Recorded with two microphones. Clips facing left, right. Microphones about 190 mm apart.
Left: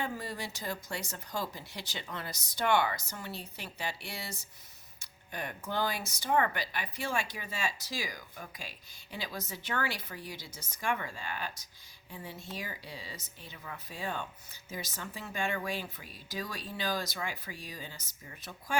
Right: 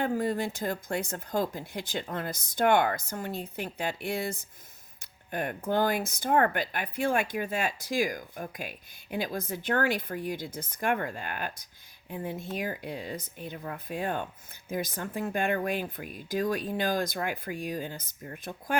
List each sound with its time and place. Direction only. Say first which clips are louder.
0.0 s speech: right 9 dB; 50° right (ahead or behind)